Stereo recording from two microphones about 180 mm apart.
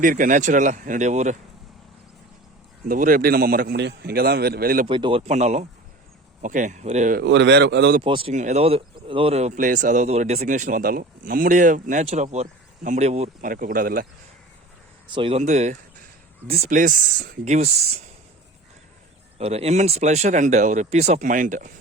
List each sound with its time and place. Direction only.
0.0 s speech: 45° right (ahead or behind)
2.9 s a man's voice: 50° right (ahead or behind)
4.9 s speech: 30° right (ahead or behind)
7.2 s speech: 75° right (ahead or behind)
8.0 s speech: 30° right (ahead or behind)
8.3 s speech: 40° right (ahead or behind)
13.5 s speech: 50° right (ahead or behind)
15.1 s speech: 30° right (ahead or behind)
19.4 s speech: 35° right (ahead or behind)